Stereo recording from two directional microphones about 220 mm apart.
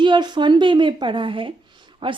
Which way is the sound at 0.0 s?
20° right (ahead or behind).